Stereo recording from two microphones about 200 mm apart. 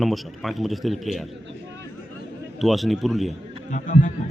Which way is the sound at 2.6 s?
Centre (ahead or behind).